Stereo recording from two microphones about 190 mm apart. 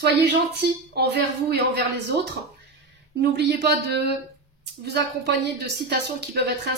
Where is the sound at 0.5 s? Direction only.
60° right (ahead or behind).